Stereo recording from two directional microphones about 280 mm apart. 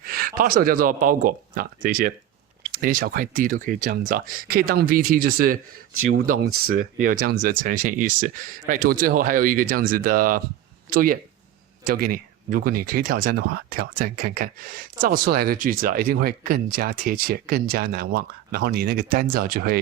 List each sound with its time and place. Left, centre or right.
0.0 s speech: right
6.3 s speech: right
6.7 s speech: right